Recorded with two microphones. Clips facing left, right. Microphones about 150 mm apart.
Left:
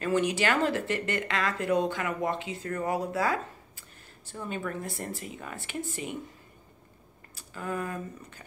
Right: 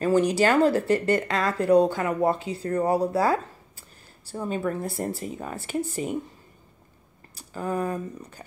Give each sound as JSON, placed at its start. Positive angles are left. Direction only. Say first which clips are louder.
{"t": 0.0, "sound": "speech", "louder": "right 6 dB", "side_deg": -35}
{"t": 7.3, "sound": "speech", "louder": "right 6 dB", "side_deg": -35}